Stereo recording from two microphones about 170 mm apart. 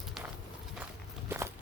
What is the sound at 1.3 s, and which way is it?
Walk, 15° right (ahead or behind).